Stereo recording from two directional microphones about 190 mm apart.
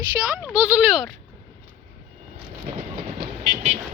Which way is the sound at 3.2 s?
35° right (ahead or behind).